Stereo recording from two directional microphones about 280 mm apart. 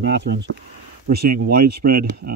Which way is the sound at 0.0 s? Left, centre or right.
Right.